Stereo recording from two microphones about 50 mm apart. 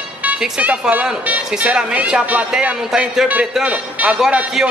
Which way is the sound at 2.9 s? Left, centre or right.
Centre.